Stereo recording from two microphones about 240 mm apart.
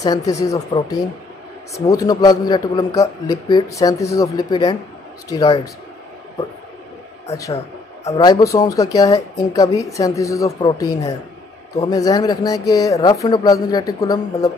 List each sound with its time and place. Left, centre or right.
0.0 s a man's voice: centre
8.1 s a man's voice: centre